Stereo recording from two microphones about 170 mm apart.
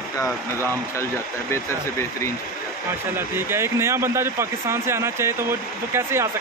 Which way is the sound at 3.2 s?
15° right (ahead or behind).